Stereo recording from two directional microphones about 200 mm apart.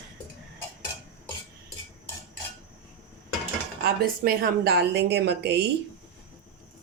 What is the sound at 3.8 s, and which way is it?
A woman's voice, 50° right (ahead or behind).